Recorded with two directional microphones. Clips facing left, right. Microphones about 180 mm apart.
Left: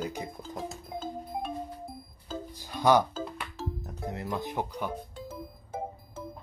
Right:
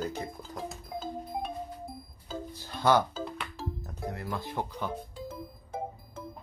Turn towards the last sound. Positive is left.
turn(degrees=5)  # may be behind; listen again after turning